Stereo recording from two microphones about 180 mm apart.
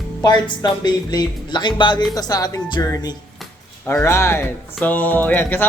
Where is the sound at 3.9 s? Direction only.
15° left (ahead or behind).